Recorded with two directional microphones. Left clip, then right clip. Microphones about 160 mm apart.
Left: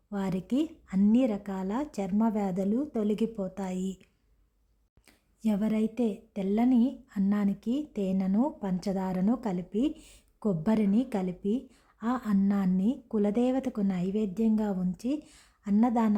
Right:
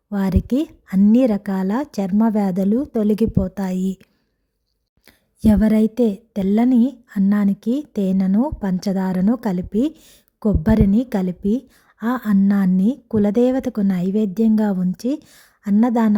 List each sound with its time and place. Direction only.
0.1 s a woman's voice: 40° right (ahead or behind)
5.0 s a woman's voice: 50° right (ahead or behind)